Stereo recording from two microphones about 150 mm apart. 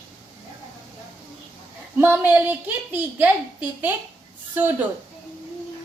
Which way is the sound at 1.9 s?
15° right (ahead or behind).